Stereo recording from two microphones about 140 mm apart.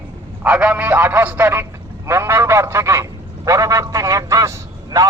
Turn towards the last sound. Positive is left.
turn(degrees=-25)  # may be behind; listen again after turning